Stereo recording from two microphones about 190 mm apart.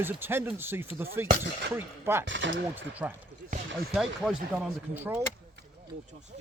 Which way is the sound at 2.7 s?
10° right (ahead or behind).